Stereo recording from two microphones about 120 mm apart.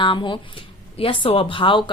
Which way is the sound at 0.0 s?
45° left (ahead or behind).